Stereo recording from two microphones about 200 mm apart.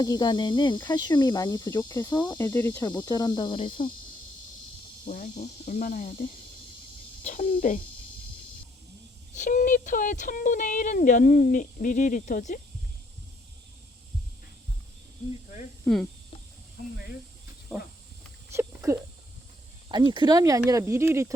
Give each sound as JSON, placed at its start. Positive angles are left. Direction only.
{"t": 0.0, "sound": "speech", "side_deg": 20}
{"t": 5.0, "sound": "speech", "side_deg": 45}
{"t": 7.3, "sound": "speech", "side_deg": 40}
{"t": 9.3, "sound": "speech", "side_deg": 35}
{"t": 17.7, "sound": "a sound", "side_deg": 5}
{"t": 18.5, "sound": "a sound", "side_deg": -15}
{"t": 19.9, "sound": "speech", "side_deg": -25}